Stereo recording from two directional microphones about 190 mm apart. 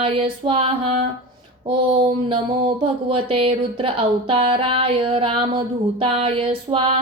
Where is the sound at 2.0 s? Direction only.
25° right (ahead or behind).